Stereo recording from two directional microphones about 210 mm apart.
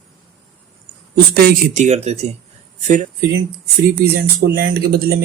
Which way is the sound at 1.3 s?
45° right (ahead or behind).